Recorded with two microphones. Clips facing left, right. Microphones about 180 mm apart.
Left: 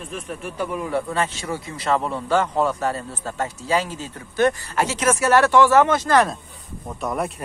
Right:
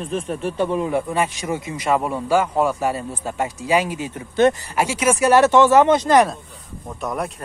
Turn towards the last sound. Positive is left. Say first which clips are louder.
# even
turn(degrees=0)  # may be behind; listen again after turning